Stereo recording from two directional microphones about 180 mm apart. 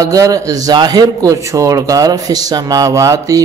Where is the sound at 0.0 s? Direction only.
20° right (ahead or behind).